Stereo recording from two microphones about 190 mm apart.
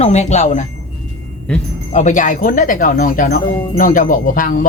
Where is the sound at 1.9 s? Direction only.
40° left (ahead or behind).